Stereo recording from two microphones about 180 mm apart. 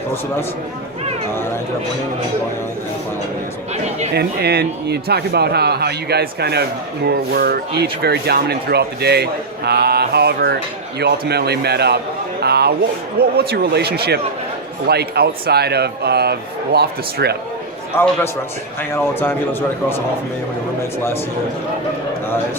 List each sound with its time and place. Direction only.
4.1 s a man's voice: 65° right (ahead or behind)
12.4 s a sound: 65° right (ahead or behind)
13.1 s a man's voice: 60° right (ahead or behind)
17.9 s speech: 15° left (ahead or behind)